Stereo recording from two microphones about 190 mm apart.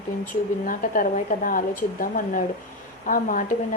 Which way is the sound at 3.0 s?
45° left (ahead or behind).